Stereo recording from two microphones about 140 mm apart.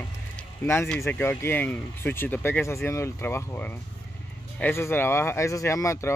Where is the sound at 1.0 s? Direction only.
15° left (ahead or behind).